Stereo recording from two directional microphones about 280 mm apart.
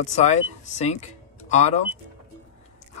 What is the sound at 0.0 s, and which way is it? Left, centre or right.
Speech, left.